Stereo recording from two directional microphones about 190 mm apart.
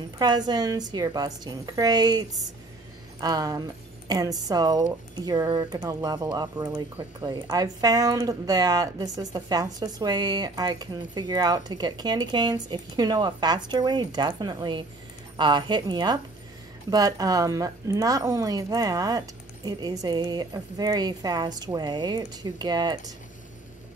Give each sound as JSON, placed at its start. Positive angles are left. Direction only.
{"t": 0.2, "sound": "speech", "side_deg": -20}